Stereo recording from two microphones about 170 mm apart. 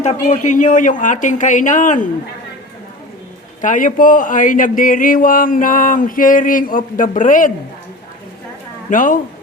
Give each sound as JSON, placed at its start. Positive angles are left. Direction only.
{"t": 0.0, "sound": "speech", "side_deg": 45}
{"t": 3.6, "sound": "speech", "side_deg": 50}
{"t": 8.9, "sound": "speech", "side_deg": 50}